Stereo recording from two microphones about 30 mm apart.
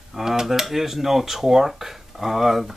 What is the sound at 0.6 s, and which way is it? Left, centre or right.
Speech, centre.